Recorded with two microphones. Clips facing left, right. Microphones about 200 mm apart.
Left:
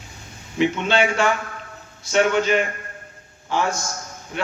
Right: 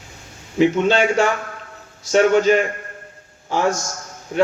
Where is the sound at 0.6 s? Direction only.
40° right (ahead or behind).